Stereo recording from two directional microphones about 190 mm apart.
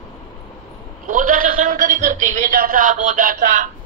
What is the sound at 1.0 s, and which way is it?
A man's voice, 45° right (ahead or behind).